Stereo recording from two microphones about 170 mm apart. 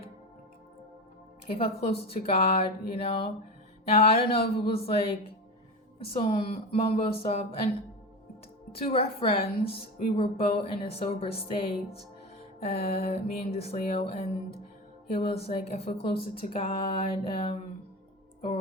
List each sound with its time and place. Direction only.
1.5 s speech: 35° left (ahead or behind)
8.9 s speech: 35° left (ahead or behind)
12.9 s speech: 35° left (ahead or behind)